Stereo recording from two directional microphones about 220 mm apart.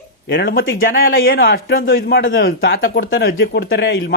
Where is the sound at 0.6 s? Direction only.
60° left (ahead or behind).